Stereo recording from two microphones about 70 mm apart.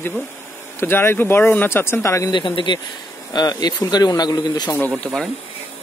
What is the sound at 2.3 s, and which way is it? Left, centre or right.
Speech, left.